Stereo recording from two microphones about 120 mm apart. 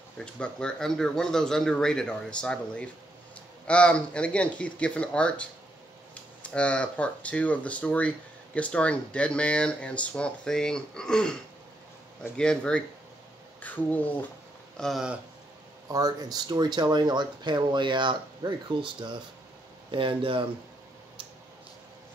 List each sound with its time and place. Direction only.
0.2 s speech: 5° left (ahead or behind)
14.8 s speech: centre (ahead or behind)
15.9 s speech: 30° right (ahead or behind); by 20.4 s 50° right (ahead or behind)